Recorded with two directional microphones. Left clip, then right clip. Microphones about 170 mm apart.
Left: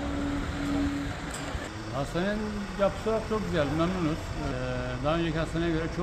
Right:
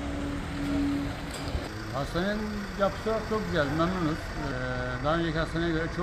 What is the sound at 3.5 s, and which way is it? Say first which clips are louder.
Speech: right 1 dB; centre (ahead or behind).